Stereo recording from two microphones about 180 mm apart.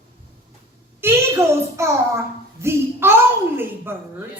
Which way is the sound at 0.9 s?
15° right (ahead or behind).